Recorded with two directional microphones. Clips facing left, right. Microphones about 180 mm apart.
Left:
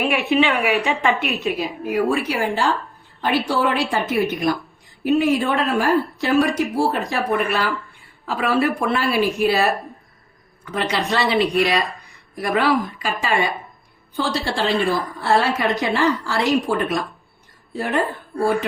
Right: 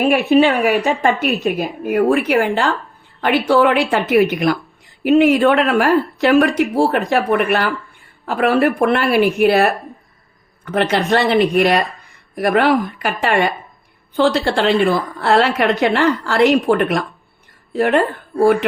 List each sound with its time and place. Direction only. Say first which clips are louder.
0.0 s a woman's voice: right 6 dB; 40° right (ahead or behind)
2.0 s a woman's voice: right 6 dB; 55° right (ahead or behind)
11.1 s a woman's voice: right 4 dB; 50° right (ahead or behind)